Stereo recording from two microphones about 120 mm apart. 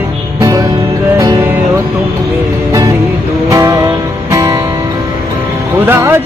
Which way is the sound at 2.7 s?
25° right (ahead or behind).